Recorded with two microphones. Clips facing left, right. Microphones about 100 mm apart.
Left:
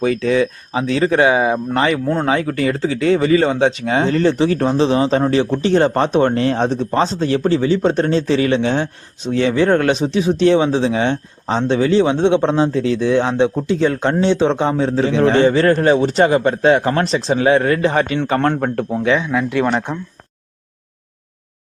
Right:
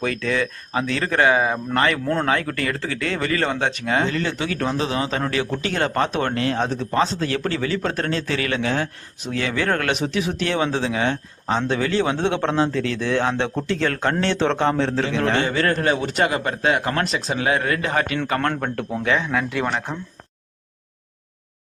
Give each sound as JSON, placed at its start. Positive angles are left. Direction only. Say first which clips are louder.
{"t": 0.0, "sound": "speech", "louder": "left 7 dB", "side_deg": 20}
{"t": 4.1, "sound": "speech", "louder": "left 10 dB", "side_deg": 35}
{"t": 19.2, "sound": "a man's voice", "louder": "left 4 dB", "side_deg": 10}